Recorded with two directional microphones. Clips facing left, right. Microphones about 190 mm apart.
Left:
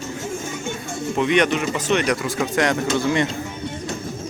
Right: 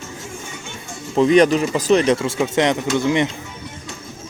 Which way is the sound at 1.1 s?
35° right (ahead or behind).